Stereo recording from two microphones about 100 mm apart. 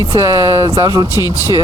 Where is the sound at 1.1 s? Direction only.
35° left (ahead or behind).